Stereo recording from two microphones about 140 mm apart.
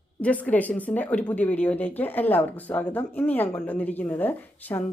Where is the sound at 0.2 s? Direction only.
10° left (ahead or behind).